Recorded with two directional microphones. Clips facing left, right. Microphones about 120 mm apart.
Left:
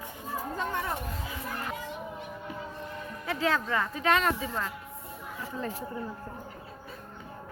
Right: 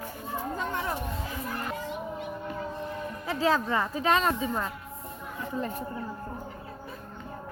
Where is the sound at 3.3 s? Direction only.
35° right (ahead or behind).